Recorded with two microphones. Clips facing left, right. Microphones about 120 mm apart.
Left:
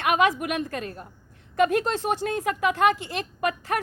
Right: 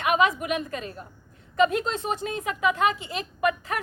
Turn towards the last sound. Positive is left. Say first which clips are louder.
# even
turn(degrees=60)  # may be behind; listen again after turning